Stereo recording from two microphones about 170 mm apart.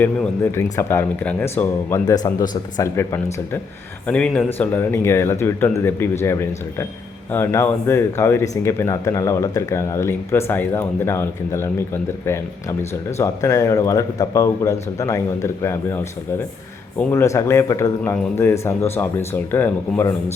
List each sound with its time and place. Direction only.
0.5 s speech: 15° left (ahead or behind)
13.1 s a man's voice: 15° left (ahead or behind)
17.0 s speech: 15° left (ahead or behind)